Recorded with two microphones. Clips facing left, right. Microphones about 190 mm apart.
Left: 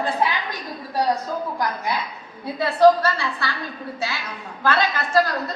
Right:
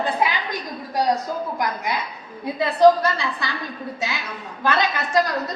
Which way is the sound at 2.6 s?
20° right (ahead or behind).